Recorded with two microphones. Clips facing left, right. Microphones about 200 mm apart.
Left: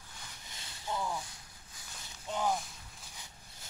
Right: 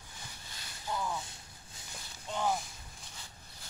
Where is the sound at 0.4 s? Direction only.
20° left (ahead or behind).